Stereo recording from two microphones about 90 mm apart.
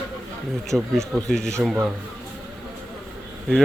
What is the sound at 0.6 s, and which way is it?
Speech, 5° left (ahead or behind).